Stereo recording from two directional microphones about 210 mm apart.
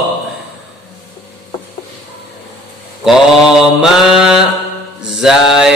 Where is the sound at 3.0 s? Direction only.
Centre (ahead or behind).